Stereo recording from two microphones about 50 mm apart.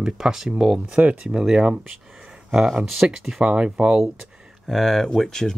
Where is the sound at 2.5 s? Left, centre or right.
Centre.